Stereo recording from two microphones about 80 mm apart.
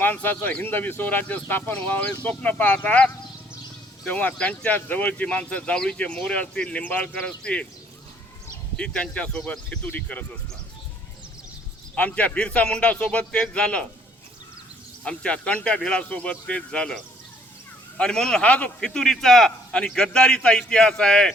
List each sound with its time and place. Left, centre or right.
0.0 s speech: left
8.7 s speech: centre
11.9 s speech: centre
15.0 s speech: centre
18.9 s speech: centre